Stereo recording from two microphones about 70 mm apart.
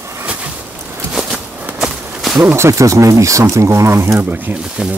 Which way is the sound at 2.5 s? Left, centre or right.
Right.